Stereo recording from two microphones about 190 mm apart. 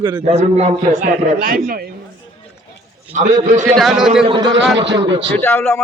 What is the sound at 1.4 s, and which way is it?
Speech, 50° right (ahead or behind).